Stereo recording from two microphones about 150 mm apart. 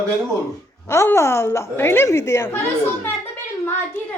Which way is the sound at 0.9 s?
20° left (ahead or behind).